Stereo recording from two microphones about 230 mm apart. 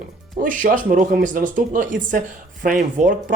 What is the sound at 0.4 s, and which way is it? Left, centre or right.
Speech, right.